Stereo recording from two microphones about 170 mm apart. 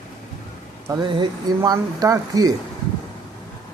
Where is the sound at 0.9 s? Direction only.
25° right (ahead or behind).